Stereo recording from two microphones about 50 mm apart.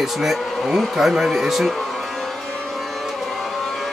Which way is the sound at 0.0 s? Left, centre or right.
Centre.